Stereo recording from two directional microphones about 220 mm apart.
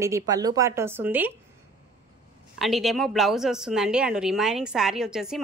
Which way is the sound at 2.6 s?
Centre (ahead or behind).